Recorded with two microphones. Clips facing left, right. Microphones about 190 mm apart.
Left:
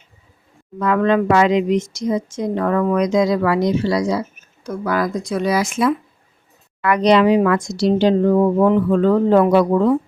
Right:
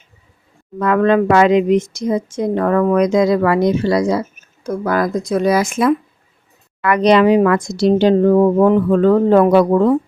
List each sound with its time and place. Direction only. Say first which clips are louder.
0.8 s speech: right 3 dB; 55° right (ahead or behind)